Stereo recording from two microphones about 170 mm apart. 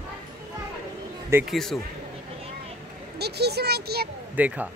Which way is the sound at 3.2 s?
75° right (ahead or behind).